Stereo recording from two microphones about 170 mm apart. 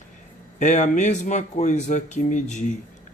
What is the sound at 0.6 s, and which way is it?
Speech, 45° left (ahead or behind).